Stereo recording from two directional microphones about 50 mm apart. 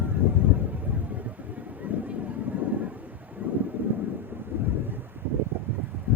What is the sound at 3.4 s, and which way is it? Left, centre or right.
Wind noise, right.